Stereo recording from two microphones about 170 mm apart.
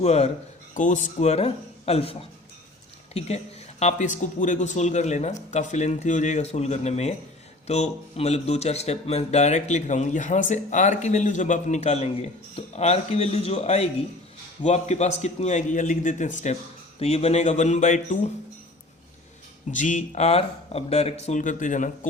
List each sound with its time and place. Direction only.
0.0 s speech: 40° left (ahead or behind)
0.7 s a man's voice: 50° left (ahead or behind)
19.7 s a man's voice: 45° left (ahead or behind)